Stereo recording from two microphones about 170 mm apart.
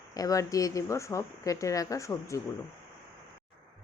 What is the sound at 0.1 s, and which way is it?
A woman's voice, 20° left (ahead or behind).